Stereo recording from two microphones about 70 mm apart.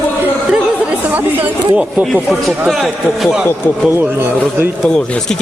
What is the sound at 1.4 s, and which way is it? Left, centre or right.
Speech, right.